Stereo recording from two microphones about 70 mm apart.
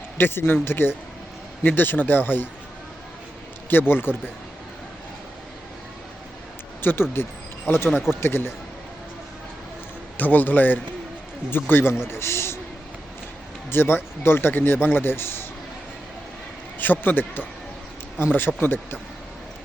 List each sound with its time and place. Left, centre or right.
0.2 s a man's voice: left
3.7 s a man's voice: left
6.8 s a man's voice: left
10.2 s a man's voice: left
13.7 s a man's voice: left
16.7 s a man's voice: left